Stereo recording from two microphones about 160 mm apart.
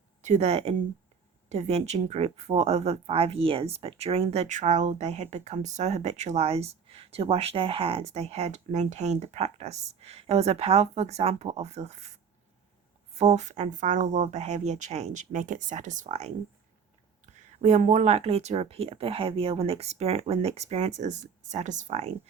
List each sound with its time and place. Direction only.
0.2 s speech: 45° right (ahead or behind)
13.1 s speech: 45° right (ahead or behind)
17.6 s speech: 45° right (ahead or behind)